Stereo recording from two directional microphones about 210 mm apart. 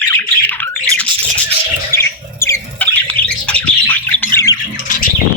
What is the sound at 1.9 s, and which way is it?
Bird, 10° left (ahead or behind).